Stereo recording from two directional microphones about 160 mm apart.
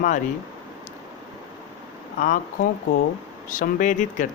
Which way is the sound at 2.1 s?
55° left (ahead or behind).